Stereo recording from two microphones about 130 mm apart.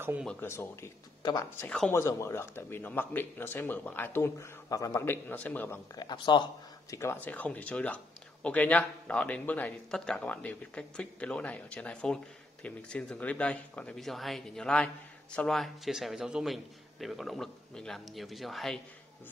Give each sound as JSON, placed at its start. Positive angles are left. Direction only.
{"t": 0.4, "sound": "speech", "side_deg": 20}
{"t": 5.9, "sound": "speech", "side_deg": 35}
{"t": 6.9, "sound": "a man's voice", "side_deg": 20}